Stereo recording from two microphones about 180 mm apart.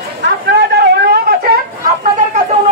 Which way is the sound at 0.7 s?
70° right (ahead or behind).